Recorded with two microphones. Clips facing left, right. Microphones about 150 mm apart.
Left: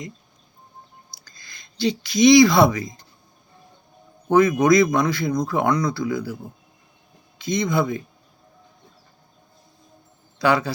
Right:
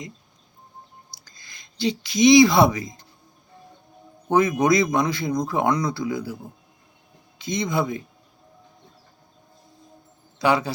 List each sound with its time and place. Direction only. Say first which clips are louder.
1.1 s speech: left 1 dB; 20° right (ahead or behind)
4.3 s speech: left 3 dB; 20° right (ahead or behind)
7.3 s speech: left 3 dB; 25° right (ahead or behind)
10.3 s a man's voice: left 1 dB; 20° right (ahead or behind)